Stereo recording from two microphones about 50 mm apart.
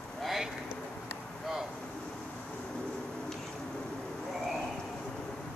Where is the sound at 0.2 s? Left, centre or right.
Centre.